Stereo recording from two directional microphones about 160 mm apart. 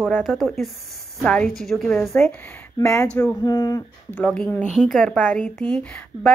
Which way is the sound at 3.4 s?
25° left (ahead or behind).